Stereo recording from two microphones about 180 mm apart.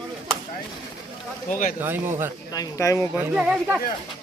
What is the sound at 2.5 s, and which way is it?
Speech, 20° left (ahead or behind).